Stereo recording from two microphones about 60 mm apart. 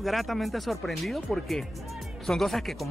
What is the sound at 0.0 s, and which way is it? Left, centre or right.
Speech, centre.